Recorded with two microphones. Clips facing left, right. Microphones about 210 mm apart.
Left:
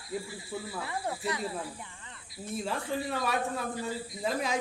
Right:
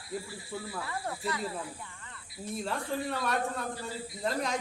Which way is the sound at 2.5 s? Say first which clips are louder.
Left 1 dB; centre (ahead or behind).